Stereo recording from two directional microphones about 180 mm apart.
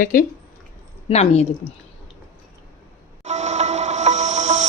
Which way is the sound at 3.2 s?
40° right (ahead or behind).